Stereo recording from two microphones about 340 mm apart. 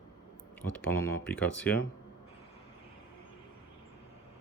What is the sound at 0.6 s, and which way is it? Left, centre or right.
Speech, centre.